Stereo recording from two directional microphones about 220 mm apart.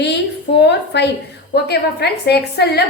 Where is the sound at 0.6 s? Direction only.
50° left (ahead or behind).